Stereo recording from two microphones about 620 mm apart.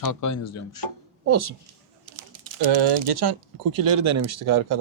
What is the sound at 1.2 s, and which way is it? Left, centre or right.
Speech, right.